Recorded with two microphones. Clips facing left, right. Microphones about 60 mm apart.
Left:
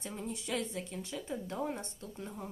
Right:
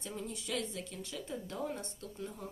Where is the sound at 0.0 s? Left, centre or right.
Centre.